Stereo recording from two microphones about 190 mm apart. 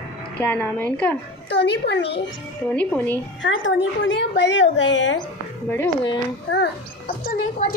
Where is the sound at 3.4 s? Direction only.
80° left.